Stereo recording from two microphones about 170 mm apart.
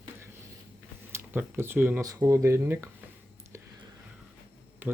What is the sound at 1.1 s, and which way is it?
Speech, 15° right (ahead or behind).